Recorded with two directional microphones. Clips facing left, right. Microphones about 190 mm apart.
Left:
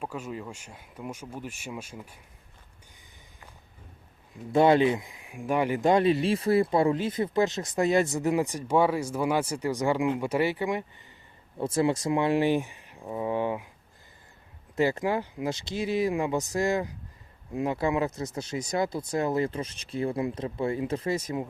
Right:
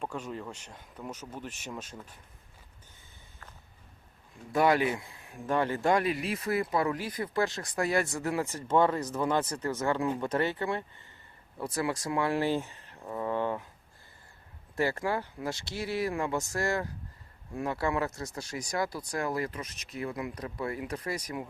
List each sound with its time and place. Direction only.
0.0 s speech: 10° left (ahead or behind)
4.5 s speech: 25° left (ahead or behind)
11.5 s speech: 25° left (ahead or behind)
14.8 s speech: 20° left (ahead or behind)